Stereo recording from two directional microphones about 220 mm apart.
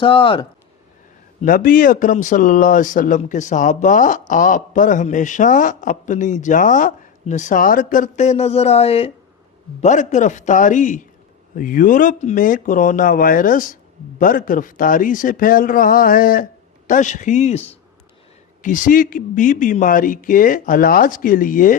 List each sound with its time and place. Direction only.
0.0 s speech: 25° left (ahead or behind)
1.4 s speech: 40° left (ahead or behind)